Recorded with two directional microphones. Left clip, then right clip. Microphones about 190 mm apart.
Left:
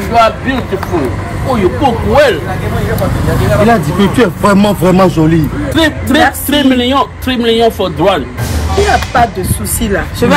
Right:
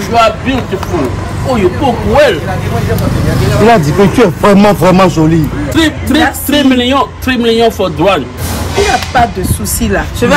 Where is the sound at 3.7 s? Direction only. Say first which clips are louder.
Right 3 dB; 50° right (ahead or behind).